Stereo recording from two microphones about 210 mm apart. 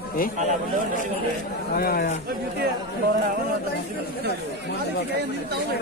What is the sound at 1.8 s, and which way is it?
Speech, 45° left (ahead or behind).